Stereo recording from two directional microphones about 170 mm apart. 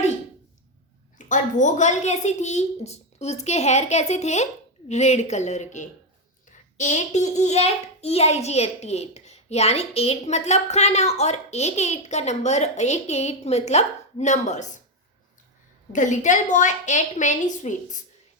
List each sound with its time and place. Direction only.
1.3 s a child's voice: 45° left (ahead or behind)
15.9 s a woman's voice: 45° left (ahead or behind)